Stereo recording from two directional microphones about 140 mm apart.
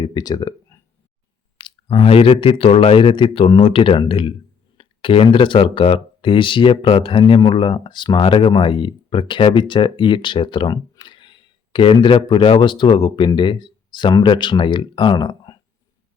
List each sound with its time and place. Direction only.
0.0 s speech: 30° left (ahead or behind)
1.5 s speech: 40° left (ahead or behind)